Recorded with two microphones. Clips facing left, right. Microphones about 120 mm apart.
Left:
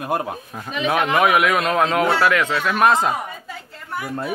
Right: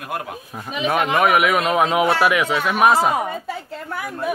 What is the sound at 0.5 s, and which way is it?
A man's voice, 5° right (ahead or behind).